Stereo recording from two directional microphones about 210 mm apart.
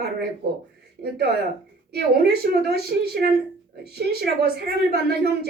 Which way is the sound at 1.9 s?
50° right (ahead or behind).